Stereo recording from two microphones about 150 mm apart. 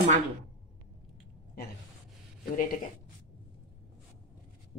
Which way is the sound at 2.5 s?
65° left (ahead or behind).